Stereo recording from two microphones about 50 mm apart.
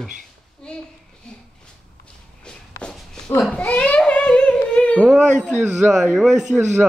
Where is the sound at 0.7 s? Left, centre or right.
Left.